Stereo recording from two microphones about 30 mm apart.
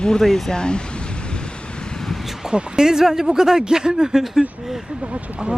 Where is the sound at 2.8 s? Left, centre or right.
Centre.